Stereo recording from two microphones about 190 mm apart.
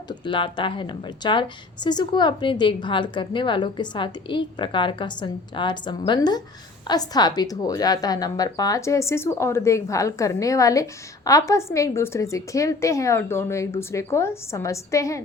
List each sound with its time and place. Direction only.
0.1 s a woman's voice: 25° left (ahead or behind)